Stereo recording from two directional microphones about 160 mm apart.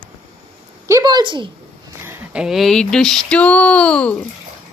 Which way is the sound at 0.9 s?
20° right (ahead or behind).